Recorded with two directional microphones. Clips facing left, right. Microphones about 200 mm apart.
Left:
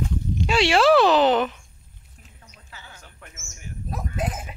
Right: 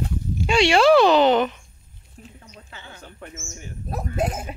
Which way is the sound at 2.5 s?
30° right (ahead or behind).